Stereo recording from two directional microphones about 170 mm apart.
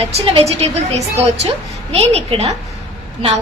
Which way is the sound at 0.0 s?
35° right (ahead or behind).